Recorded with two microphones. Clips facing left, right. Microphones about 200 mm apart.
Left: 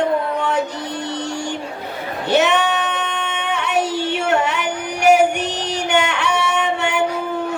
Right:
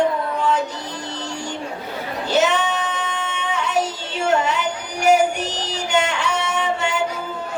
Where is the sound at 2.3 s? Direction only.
65° left (ahead or behind).